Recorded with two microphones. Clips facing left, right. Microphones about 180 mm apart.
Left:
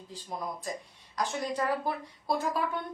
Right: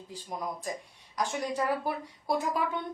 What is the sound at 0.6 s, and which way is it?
A woman's voice, 15° right (ahead or behind).